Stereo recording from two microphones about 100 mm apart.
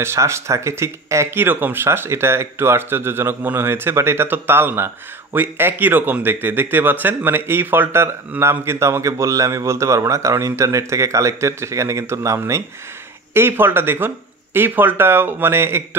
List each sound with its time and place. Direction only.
0.0 s speech: 25° right (ahead or behind)